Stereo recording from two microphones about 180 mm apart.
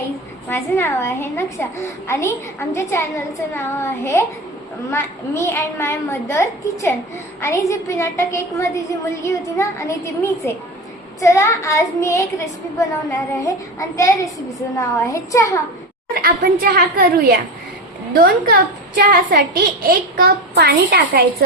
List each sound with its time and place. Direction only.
0.5 s a child's voice: 15° left (ahead or behind)
16.1 s a child's voice: 55° right (ahead or behind)